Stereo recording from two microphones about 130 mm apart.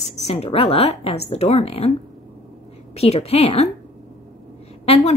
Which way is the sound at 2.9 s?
50° left (ahead or behind).